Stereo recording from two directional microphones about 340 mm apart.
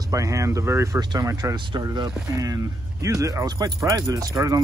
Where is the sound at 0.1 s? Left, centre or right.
Centre.